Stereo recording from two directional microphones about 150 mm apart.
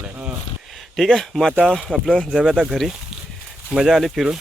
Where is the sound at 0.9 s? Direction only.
Centre (ahead or behind).